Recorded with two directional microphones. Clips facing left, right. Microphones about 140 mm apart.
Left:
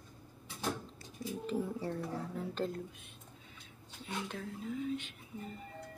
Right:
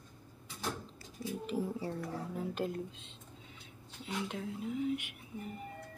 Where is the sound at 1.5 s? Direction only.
5° right (ahead or behind).